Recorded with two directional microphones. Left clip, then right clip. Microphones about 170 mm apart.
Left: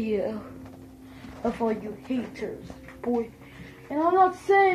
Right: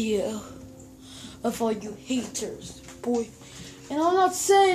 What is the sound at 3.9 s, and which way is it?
Speech, 25° right (ahead or behind).